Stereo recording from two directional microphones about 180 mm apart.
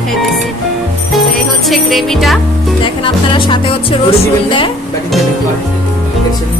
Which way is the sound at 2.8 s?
30° left (ahead or behind).